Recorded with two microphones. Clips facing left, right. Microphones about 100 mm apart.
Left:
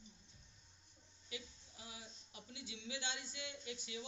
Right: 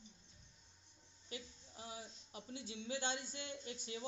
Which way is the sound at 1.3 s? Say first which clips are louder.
Right 1 dB; 40° right (ahead or behind).